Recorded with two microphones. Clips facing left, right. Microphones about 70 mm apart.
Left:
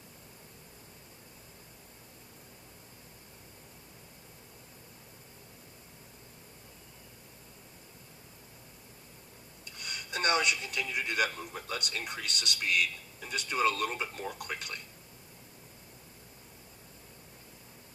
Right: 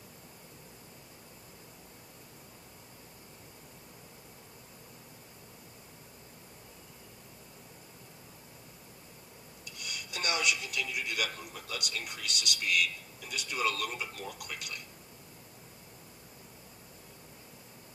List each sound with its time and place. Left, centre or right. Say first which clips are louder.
9.6 s speech: left 2 dB; left